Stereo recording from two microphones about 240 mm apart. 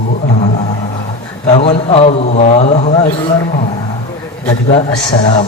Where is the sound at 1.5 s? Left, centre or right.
Left.